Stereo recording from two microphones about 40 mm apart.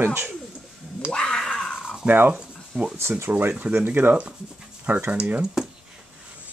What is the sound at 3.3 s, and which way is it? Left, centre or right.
Speech, right.